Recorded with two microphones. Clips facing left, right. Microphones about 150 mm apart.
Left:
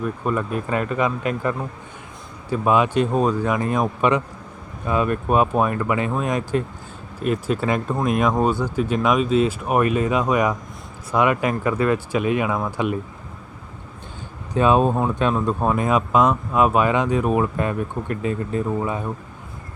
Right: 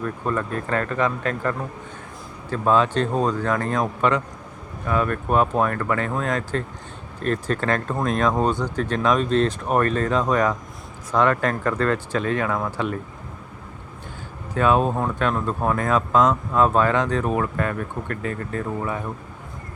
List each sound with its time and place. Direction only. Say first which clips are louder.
0.0 s speech: left 2 dB; 10° left (ahead or behind)
14.5 s speech: left 2 dB; 20° left (ahead or behind)